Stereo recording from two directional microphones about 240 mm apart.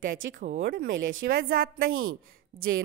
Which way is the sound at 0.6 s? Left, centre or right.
Right.